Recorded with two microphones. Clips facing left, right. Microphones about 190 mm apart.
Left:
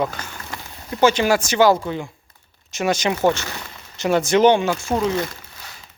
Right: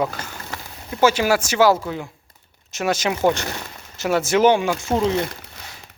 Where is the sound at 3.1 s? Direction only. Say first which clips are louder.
Right 1 dB; 15° right (ahead or behind).